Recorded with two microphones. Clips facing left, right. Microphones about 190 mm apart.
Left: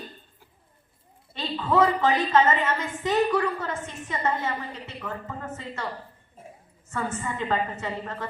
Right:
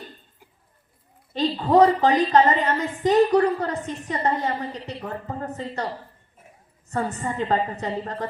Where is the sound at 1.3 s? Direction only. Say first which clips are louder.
Right 6 dB; 35° right (ahead or behind).